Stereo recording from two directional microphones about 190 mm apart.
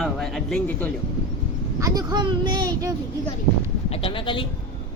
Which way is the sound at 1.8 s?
20° right (ahead or behind).